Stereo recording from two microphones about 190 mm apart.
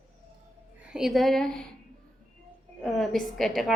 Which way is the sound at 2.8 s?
Centre (ahead or behind).